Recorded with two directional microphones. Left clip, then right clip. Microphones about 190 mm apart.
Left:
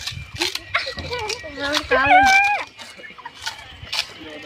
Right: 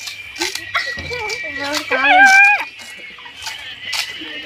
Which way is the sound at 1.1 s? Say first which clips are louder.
Right 3 dB; 35° left (ahead or behind).